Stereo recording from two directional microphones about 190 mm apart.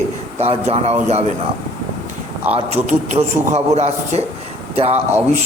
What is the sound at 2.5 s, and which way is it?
A man's voice, 35° right (ahead or behind).